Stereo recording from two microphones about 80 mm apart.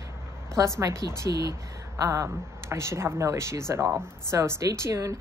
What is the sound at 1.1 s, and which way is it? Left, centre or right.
A woman's voice, right.